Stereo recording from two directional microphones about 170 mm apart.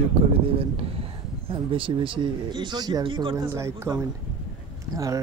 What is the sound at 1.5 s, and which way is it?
Speech, 30° right (ahead or behind).